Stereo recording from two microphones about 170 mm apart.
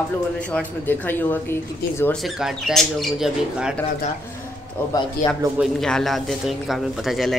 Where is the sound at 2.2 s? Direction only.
Centre (ahead or behind).